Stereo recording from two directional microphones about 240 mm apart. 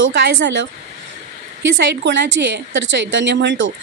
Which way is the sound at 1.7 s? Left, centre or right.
Right.